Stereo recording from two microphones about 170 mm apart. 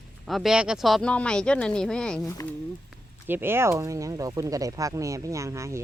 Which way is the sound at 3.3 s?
15° right (ahead or behind).